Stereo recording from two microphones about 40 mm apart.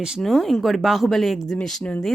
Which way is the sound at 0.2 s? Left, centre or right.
Centre.